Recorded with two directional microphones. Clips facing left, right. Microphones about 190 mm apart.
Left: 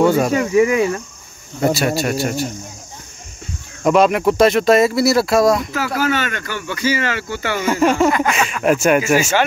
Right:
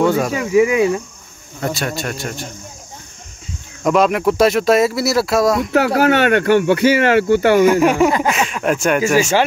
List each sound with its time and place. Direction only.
0.0 s speech: centre (ahead or behind)
1.6 s a man's voice: 10° left (ahead or behind)
3.8 s speech: centre (ahead or behind)
5.6 s speech: 65° right (ahead or behind)
7.6 s speech: 15° right (ahead or behind)
8.2 s speech: 5° right (ahead or behind)